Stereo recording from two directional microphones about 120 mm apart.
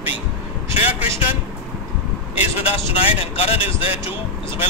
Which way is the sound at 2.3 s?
55° left (ahead or behind).